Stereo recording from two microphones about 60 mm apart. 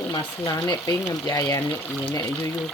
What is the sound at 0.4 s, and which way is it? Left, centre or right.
Speech, left.